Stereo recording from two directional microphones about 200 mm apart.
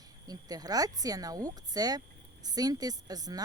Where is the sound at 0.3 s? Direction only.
20° right (ahead or behind).